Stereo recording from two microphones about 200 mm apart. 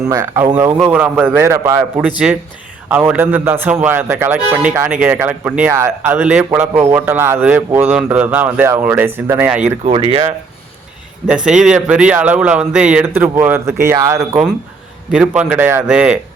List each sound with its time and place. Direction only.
0.0 s a man's voice: 15° right (ahead or behind)
9.8 s speech: 30° right (ahead or behind)
11.3 s a man's voice: 5° right (ahead or behind)